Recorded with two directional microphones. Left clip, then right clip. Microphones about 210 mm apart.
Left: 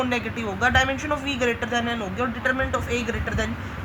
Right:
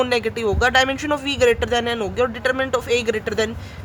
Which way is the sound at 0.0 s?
50° right (ahead or behind).